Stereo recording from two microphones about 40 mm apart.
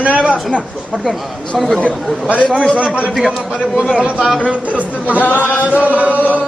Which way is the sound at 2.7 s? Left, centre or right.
Right.